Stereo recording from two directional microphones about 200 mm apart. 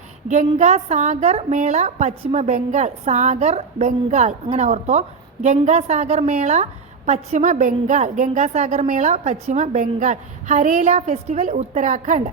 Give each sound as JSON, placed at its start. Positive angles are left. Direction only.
{"t": 0.3, "sound": "a woman's voice", "side_deg": -35}